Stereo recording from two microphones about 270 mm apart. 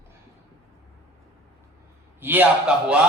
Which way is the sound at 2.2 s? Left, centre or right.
Centre.